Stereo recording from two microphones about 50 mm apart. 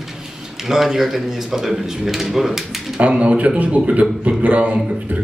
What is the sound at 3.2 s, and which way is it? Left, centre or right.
A man's voice, right.